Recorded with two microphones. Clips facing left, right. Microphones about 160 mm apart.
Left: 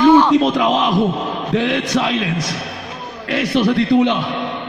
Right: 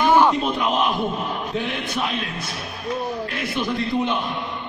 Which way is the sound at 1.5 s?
90° left.